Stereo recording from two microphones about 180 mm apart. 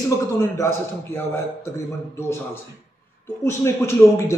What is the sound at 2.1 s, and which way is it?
Speech, 15° left (ahead or behind).